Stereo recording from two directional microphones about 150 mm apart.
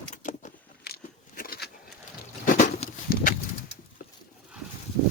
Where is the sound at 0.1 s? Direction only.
55° left (ahead or behind).